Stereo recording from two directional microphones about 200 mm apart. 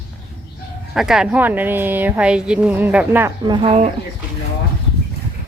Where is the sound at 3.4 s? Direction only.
20° right (ahead or behind).